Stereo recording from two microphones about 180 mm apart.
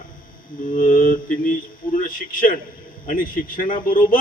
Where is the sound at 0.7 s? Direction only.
45° left (ahead or behind).